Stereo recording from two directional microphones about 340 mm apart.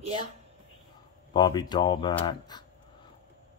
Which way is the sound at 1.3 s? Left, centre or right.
Centre.